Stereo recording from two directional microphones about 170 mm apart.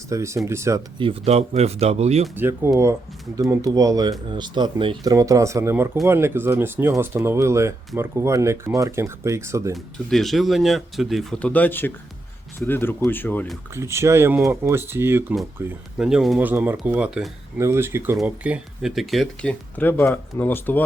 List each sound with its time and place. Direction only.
0.1 s speech: 15° right (ahead or behind)
0.9 s speech: 35° right (ahead or behind)
2.3 s speech: 15° right (ahead or behind)
9.7 s speech: centre (ahead or behind)
13.7 s speech: 15° right (ahead or behind); by 20.8 s 10° left (ahead or behind)